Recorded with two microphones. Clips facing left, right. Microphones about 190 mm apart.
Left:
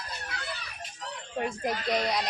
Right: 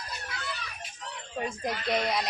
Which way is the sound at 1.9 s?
Centre (ahead or behind).